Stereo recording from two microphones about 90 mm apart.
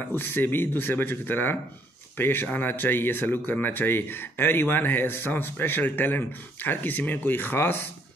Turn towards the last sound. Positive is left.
turn(degrees=25)  # may be behind; listen again after turning